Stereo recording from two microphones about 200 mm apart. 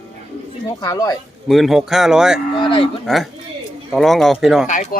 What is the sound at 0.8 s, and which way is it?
Speech, 20° left (ahead or behind).